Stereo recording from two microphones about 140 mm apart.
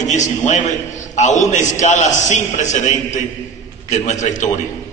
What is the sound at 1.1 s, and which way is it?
A man's voice, 60° left (ahead or behind).